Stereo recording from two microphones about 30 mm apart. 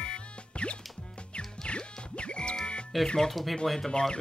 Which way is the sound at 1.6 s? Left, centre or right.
Left.